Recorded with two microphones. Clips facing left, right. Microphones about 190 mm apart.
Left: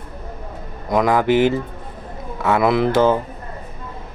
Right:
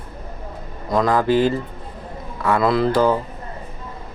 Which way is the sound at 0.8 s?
20° left (ahead or behind).